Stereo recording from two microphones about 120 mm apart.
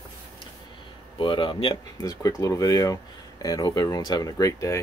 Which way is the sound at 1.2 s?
40° left (ahead or behind).